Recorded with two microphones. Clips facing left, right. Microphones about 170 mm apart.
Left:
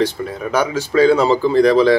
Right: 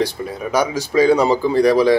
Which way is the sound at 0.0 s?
15° right (ahead or behind).